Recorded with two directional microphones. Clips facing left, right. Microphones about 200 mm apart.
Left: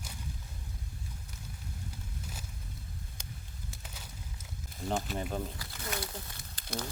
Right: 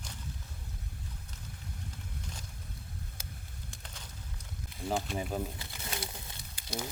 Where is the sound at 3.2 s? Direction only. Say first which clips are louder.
Left 1 dB; 5° right (ahead or behind).